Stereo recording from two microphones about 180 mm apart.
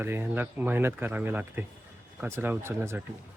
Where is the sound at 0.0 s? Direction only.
10° right (ahead or behind).